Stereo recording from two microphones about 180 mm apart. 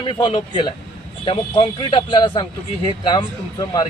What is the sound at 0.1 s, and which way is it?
A man's voice, 25° left (ahead or behind).